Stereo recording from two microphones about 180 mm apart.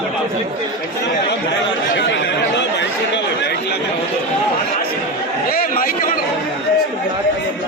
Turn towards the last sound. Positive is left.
turn(degrees=50)  # may be behind; listen again after turning